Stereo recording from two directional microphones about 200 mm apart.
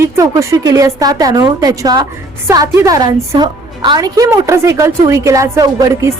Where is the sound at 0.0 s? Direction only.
15° right (ahead or behind).